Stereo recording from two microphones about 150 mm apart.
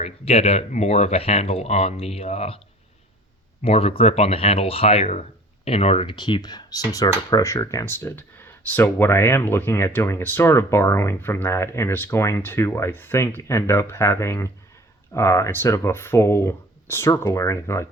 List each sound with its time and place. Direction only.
0.0 s speech: 45° left (ahead or behind)
3.6 s speech: 40° left (ahead or behind); by 17.8 s 20° left (ahead or behind)